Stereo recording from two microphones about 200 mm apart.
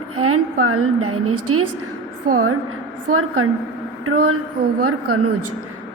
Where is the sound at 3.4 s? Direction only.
90° right.